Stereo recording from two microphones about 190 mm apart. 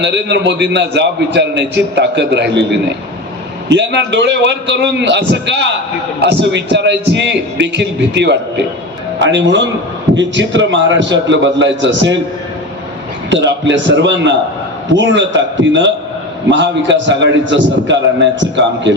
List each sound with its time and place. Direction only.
0.0 s a man's voice: 65° right (ahead or behind)
3.7 s a man's voice: 65° right (ahead or behind)
13.3 s a man's voice: 70° right (ahead or behind)